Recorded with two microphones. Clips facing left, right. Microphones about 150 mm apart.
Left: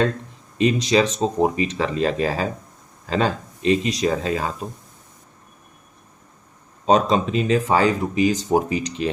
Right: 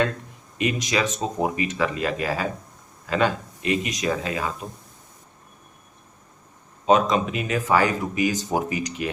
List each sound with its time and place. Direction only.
0.6 s speech: 30° left (ahead or behind)
6.8 s speech: 35° left (ahead or behind)